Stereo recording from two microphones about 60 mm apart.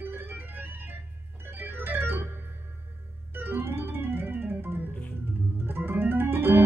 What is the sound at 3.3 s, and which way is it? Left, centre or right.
Organ, right.